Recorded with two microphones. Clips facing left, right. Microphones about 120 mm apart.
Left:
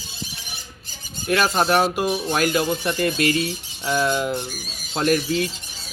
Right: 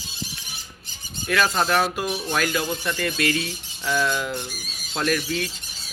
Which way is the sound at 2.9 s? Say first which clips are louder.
Left 4 dB; 35° left (ahead or behind).